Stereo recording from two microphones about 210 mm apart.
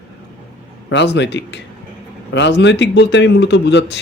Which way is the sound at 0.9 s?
55° left (ahead or behind).